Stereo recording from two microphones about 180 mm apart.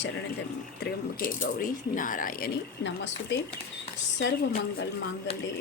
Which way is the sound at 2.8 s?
80° left.